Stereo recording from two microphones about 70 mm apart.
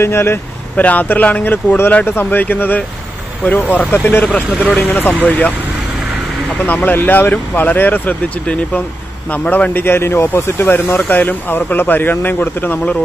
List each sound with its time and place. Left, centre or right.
0.0 s speech: left
0.7 s speech: left
6.6 s speech: left